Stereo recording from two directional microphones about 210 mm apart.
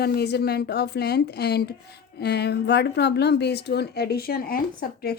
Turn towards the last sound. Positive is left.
turn(degrees=45)  # may be behind; listen again after turning